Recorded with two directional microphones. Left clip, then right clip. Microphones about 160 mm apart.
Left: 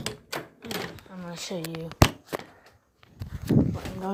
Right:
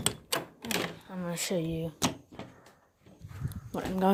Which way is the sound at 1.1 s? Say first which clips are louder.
Right 2 dB; 40° right (ahead or behind).